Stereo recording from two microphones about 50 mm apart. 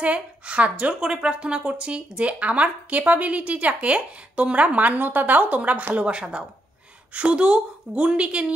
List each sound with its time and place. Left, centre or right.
0.0 s speech: right